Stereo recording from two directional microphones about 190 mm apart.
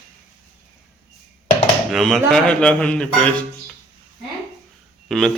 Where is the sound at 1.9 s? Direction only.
Centre (ahead or behind).